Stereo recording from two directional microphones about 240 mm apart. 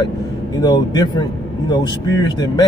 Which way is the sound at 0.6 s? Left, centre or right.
Centre.